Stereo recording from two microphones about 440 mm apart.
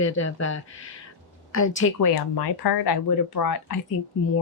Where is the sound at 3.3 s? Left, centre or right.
Left.